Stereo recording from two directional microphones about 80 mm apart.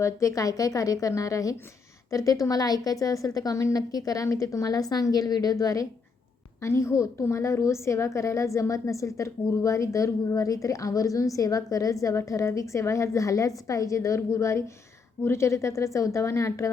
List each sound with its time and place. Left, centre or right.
0.0 s a woman's voice: left